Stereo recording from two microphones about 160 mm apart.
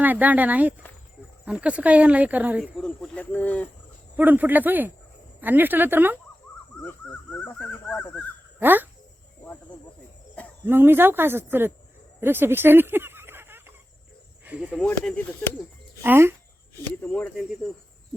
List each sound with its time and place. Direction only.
0.0 s speech: 10° right (ahead or behind)
2.7 s speech: 5° left (ahead or behind)
4.2 s speech: 10° right (ahead or behind)
6.8 s a sound: 10° left (ahead or behind)
8.5 s speech: 10° right (ahead or behind)
9.4 s cricket: 10° left (ahead or behind)
10.7 s speech: 15° right (ahead or behind)
12.2 s a sound: 15° right (ahead or behind)
14.4 s speech: 10° right (ahead or behind)
14.8 s speech: 10° left (ahead or behind)
16.0 s speech: 15° right (ahead or behind)
16.8 s speech: 10° left (ahead or behind)